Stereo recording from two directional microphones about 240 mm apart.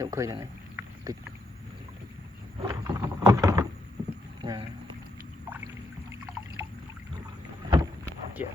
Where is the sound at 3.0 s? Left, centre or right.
Centre.